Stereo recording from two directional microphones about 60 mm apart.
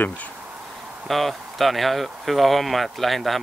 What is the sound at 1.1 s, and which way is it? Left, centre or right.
Speech, centre.